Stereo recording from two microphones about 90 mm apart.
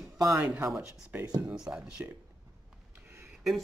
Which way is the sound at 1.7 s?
20° right (ahead or behind).